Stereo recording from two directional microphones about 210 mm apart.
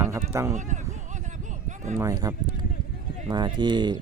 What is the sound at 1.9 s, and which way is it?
Speech, 15° right (ahead or behind).